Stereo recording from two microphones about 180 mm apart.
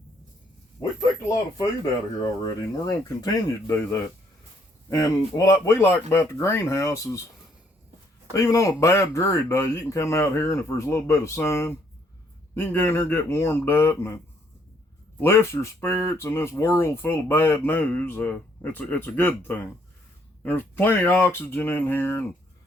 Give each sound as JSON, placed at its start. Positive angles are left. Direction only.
{"t": 0.8, "sound": "a sound", "side_deg": 15}
{"t": 1.5, "sound": "speech", "side_deg": 20}
{"t": 4.9, "sound": "speech", "side_deg": 20}
{"t": 8.3, "sound": "speech", "side_deg": 20}
{"t": 15.2, "sound": "speech", "side_deg": 15}